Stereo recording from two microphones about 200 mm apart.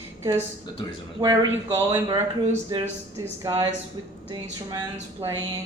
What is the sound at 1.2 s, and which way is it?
Speech, 15° right (ahead or behind).